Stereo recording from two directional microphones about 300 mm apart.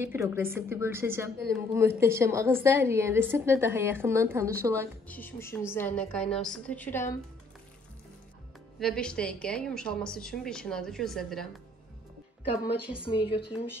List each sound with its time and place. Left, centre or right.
0.0 s a woman's voice: centre
5.0 s a woman's voice: centre
8.7 s a woman's voice: centre
12.9 s speech: centre